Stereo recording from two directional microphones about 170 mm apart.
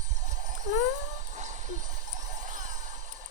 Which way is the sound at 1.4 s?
45° right (ahead or behind).